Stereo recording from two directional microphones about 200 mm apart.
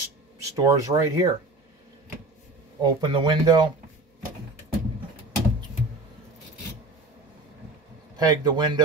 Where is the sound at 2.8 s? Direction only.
25° right (ahead or behind).